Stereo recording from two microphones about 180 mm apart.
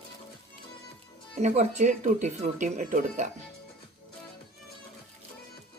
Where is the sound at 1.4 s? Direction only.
40° right (ahead or behind).